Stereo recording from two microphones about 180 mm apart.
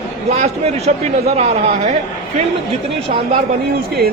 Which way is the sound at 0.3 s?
35° right (ahead or behind).